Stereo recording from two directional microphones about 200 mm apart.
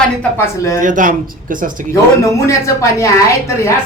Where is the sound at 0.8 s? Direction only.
40° right (ahead or behind).